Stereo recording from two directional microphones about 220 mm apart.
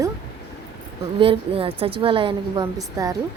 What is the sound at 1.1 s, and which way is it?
A woman's voice, 25° right (ahead or behind).